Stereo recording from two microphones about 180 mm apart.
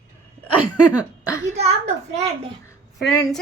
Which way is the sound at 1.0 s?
15° left (ahead or behind).